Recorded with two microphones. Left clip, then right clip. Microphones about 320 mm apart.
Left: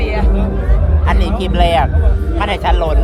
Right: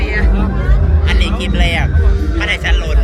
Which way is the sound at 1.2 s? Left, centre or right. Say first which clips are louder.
Left 4 dB; left.